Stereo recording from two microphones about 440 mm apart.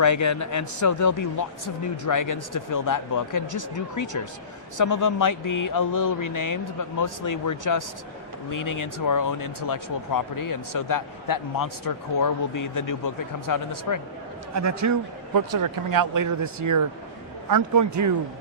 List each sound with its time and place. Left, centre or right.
0.0 s speech: left
14.5 s a man's voice: right